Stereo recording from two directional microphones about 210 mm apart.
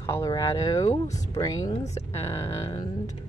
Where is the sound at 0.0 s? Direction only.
15° left (ahead or behind).